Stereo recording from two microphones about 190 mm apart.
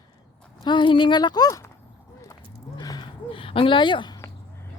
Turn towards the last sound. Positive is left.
turn(degrees=20)  # may be behind; listen again after turning